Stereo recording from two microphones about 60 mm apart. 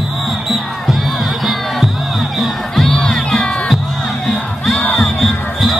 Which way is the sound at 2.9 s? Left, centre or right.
Centre.